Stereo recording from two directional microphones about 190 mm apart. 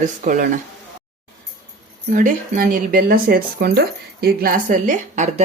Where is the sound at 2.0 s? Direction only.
45° right (ahead or behind).